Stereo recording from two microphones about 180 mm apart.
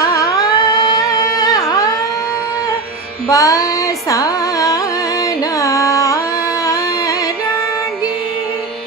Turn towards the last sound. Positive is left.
turn(degrees=20)  # may be behind; listen again after turning